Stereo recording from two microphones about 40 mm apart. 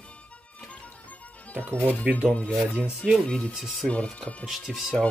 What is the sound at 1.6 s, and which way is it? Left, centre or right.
Speech, left.